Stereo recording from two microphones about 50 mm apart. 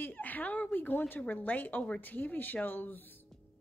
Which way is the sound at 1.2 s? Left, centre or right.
Left.